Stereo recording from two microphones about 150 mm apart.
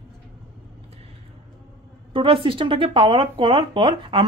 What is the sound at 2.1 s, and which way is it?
Speech, 35° right (ahead or behind).